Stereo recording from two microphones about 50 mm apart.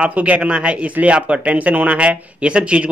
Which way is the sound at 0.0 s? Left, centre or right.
Right.